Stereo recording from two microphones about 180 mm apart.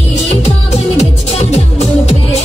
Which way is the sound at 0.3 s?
35° left (ahead or behind).